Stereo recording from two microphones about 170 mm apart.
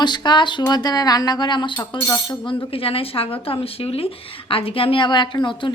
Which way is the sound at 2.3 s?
30° left (ahead or behind).